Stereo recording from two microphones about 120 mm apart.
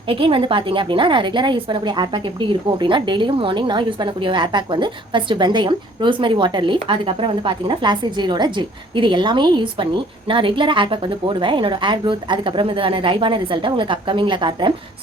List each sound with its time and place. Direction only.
0.1 s a woman's voice: 45° right (ahead or behind)